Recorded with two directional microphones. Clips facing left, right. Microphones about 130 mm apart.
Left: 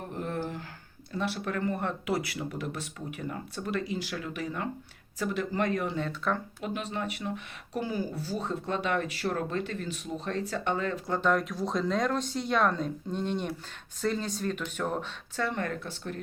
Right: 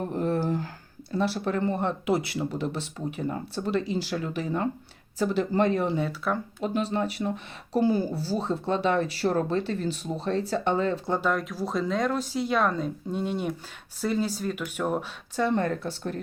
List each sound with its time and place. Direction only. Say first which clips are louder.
0.1 s a sound: right 6 dB; 35° right (ahead or behind)
1.2 s speech: right 5 dB; 30° right (ahead or behind)
6.0 s speech: right 3 dB; 10° right (ahead or behind)
6.6 s speech: right 7 dB; 35° right (ahead or behind)
11.2 s speech: even; centre (ahead or behind)
15.4 s speech: right 8 dB; 30° right (ahead or behind)